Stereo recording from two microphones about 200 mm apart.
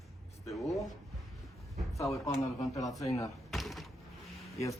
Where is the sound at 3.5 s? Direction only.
Centre (ahead or behind).